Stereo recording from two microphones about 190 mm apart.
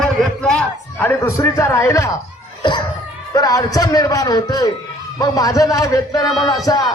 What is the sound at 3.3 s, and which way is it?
A man's voice, 20° left (ahead or behind).